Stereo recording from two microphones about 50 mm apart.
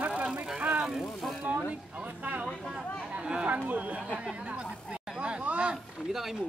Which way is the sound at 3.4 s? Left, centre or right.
Right.